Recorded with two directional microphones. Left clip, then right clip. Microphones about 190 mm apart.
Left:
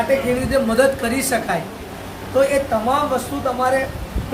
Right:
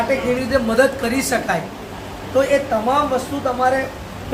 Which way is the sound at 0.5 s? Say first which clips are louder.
Even; centre (ahead or behind).